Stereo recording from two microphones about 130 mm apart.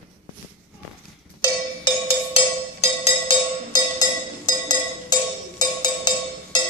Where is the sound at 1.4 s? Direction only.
30° left (ahead or behind).